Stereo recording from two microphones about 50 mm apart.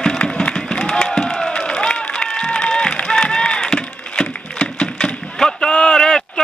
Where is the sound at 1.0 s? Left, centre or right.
Centre.